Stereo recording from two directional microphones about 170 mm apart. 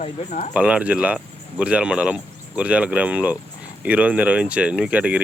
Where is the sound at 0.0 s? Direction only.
45° left (ahead or behind).